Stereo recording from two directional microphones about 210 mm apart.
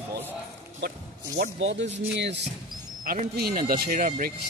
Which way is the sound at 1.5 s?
60° right (ahead or behind).